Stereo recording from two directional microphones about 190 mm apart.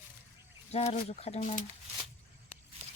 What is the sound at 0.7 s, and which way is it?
Speech, 35° left (ahead or behind).